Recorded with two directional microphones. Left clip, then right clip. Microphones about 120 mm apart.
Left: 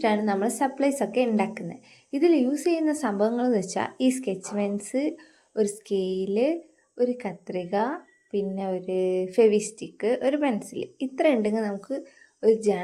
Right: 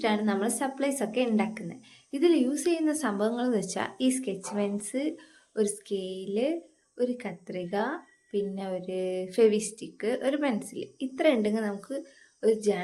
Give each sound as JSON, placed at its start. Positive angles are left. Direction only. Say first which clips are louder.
{"t": 0.0, "sound": "a woman's voice", "louder": "left 4 dB", "side_deg": 35}